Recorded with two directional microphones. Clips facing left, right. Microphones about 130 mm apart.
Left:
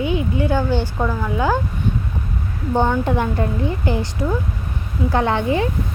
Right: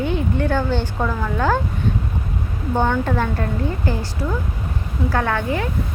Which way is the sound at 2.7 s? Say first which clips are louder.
Left 1 dB; 15° left (ahead or behind).